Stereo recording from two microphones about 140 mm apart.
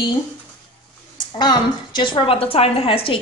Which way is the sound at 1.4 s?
35° left (ahead or behind).